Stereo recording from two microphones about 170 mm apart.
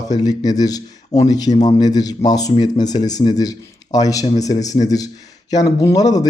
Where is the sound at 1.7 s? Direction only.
25° left (ahead or behind).